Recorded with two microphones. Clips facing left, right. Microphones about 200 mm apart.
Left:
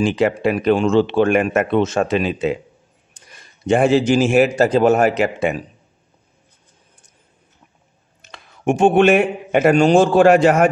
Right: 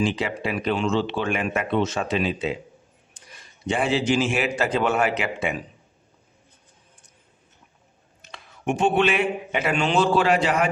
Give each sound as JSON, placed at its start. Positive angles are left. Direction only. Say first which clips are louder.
{"t": 0.0, "sound": "speech", "louder": "left 8 dB", "side_deg": 50}
{"t": 8.3, "sound": "speech", "louder": "left 7 dB", "side_deg": 50}